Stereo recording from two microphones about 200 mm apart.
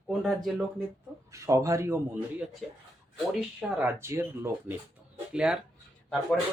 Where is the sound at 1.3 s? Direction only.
15° right (ahead or behind).